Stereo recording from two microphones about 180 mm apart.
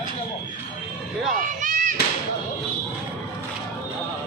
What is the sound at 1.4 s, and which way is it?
Children playing, 45° right (ahead or behind).